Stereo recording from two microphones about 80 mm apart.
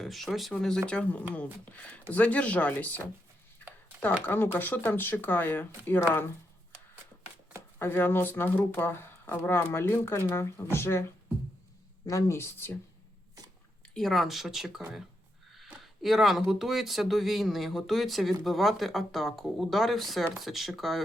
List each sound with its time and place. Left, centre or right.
0.0 s speech: centre
4.5 s speech: left
7.8 s speech: left
12.0 s speech: left
13.9 s speech: centre